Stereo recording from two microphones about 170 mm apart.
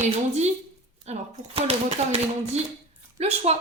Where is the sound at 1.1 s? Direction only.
40° right (ahead or behind).